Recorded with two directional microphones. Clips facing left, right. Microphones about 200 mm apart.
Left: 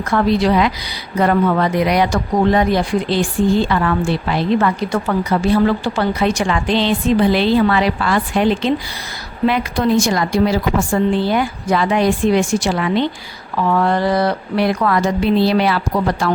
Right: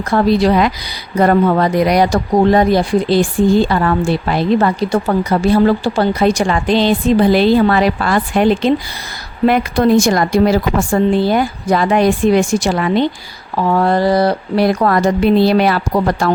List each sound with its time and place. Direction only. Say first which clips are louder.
0.0 s a woman's voice: right 3 dB; 35° right (ahead or behind)